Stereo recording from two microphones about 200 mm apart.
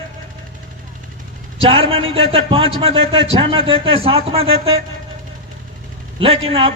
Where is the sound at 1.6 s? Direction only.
30° right (ahead or behind).